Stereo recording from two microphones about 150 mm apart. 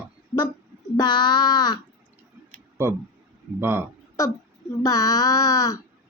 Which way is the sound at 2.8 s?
15° right (ahead or behind).